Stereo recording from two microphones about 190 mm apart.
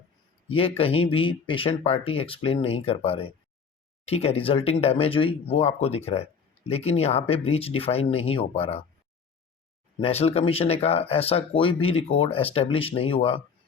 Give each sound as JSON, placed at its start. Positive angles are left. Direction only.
{"t": 0.5, "sound": "speech", "side_deg": 30}
{"t": 10.0, "sound": "speech", "side_deg": 30}